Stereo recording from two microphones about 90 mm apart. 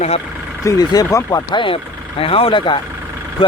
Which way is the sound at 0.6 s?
40° left (ahead or behind).